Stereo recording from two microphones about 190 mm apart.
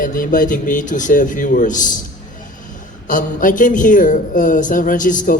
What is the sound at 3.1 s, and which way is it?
A man's voice, 45° left (ahead or behind).